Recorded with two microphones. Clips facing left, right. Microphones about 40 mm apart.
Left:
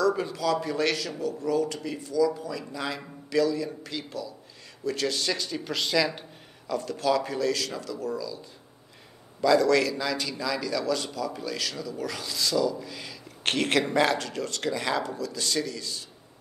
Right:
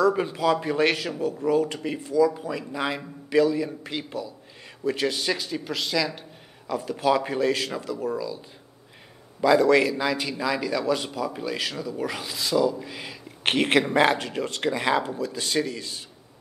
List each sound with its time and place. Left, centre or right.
0.0 s a man's voice: right; by 6.2 s centre
6.7 s a man's voice: centre